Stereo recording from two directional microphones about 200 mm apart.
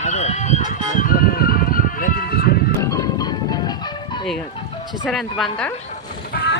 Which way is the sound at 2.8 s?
15° left (ahead or behind).